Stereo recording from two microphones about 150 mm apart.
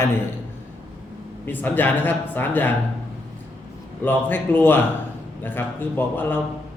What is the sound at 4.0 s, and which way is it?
A man's voice, 15° left (ahead or behind).